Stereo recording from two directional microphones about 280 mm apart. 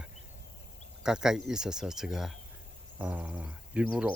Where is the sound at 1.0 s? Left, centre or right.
Centre.